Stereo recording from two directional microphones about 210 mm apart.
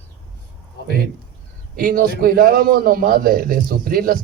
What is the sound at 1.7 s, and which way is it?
A man's voice, 45° right (ahead or behind).